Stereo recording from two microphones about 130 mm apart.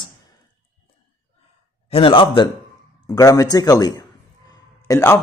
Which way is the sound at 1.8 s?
45° left (ahead or behind).